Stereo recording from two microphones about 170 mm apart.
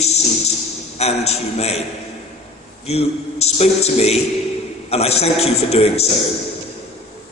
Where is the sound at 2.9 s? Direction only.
40° left (ahead or behind).